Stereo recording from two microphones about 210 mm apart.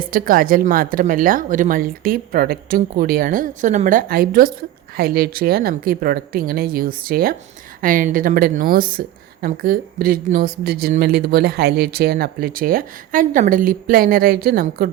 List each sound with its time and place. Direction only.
0.0 s a woman's voice: 40° right (ahead or behind)